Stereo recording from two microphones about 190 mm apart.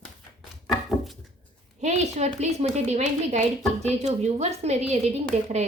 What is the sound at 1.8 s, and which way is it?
Speech, 35° right (ahead or behind).